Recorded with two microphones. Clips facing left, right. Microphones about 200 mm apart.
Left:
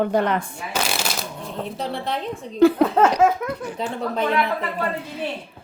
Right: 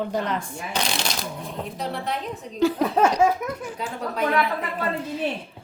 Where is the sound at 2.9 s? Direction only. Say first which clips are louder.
Left 2 dB; 10° right (ahead or behind).